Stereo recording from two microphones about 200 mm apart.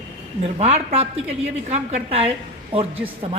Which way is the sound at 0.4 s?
30° right (ahead or behind).